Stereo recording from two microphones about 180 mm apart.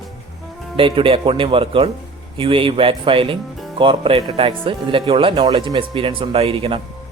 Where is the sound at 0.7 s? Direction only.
30° right (ahead or behind).